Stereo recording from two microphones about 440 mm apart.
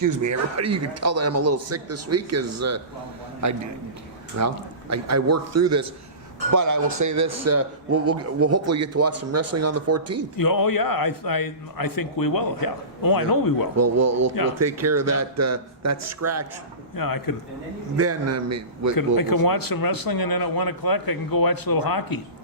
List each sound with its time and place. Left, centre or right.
0.0 s a man's voice: right
10.3 s a man's voice: left
13.7 s a man's voice: right
16.9 s a man's voice: left
17.9 s a man's voice: right
18.9 s a man's voice: left